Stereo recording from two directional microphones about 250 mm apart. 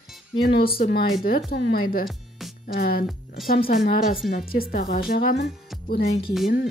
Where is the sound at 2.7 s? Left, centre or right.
Left.